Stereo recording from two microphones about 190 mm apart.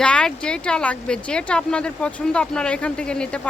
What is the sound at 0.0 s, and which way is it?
Speech, 5° left (ahead or behind).